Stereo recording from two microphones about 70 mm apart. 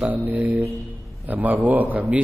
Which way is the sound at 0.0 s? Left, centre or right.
Right.